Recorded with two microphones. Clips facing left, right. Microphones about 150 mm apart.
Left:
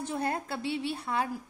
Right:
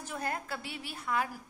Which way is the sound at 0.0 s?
30° left (ahead or behind).